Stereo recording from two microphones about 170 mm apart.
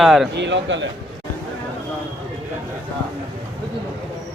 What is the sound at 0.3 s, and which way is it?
Speech, 90° right.